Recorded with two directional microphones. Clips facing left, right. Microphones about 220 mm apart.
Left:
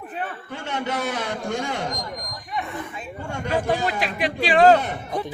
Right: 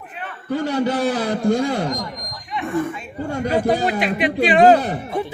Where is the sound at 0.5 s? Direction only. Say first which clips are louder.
Right 9 dB; 35° right (ahead or behind).